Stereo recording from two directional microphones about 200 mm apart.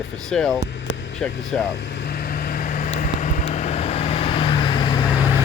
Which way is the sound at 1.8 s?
60° left (ahead or behind).